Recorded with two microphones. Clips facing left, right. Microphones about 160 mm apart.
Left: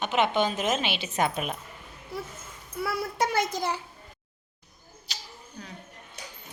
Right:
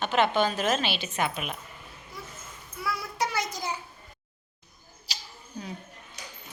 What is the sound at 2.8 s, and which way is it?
Speech, 55° left (ahead or behind).